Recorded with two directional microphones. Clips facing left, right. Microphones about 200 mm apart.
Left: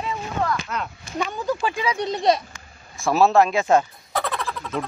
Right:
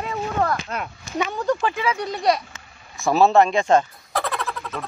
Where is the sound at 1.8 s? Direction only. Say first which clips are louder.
Left 1 dB; 20° left (ahead or behind).